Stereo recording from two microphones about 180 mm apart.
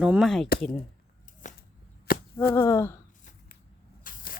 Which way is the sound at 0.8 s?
45° left (ahead or behind).